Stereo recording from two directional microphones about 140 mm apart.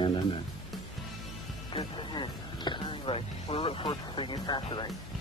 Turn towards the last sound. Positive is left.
turn(degrees=30)  # may be behind; listen again after turning